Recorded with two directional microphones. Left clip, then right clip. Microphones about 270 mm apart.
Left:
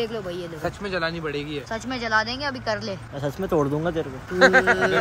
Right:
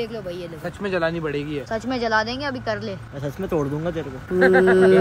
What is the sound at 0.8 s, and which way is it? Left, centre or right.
Speech, right.